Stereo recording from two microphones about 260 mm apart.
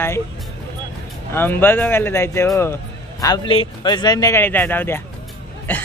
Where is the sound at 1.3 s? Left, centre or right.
Centre.